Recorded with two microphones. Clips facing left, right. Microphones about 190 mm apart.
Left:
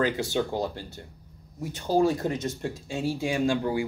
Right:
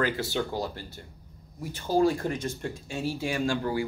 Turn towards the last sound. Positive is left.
turn(degrees=20)  # may be behind; listen again after turning